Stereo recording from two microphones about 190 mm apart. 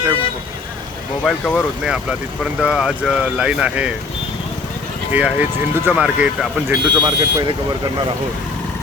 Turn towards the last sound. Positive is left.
turn(degrees=-20)  # may be behind; listen again after turning